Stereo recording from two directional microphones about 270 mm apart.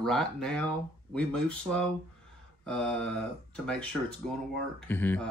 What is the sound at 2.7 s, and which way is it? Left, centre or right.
Speech, centre.